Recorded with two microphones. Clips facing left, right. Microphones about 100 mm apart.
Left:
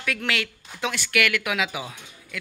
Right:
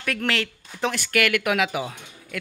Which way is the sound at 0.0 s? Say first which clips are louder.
Right 2 dB; 40° right (ahead or behind).